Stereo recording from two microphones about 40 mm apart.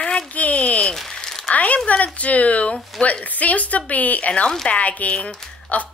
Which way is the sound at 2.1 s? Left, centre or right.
Left.